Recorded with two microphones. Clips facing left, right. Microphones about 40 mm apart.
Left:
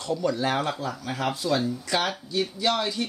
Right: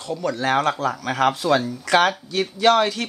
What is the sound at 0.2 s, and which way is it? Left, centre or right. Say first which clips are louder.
Speech: right 5 dB; right.